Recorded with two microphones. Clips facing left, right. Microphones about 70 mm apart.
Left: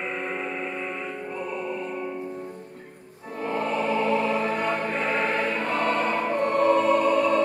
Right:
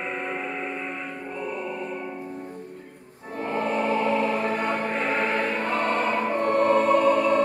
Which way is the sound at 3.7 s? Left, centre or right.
Right.